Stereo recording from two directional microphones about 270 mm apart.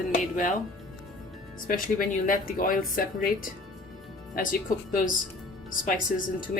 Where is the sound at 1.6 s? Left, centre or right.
Left.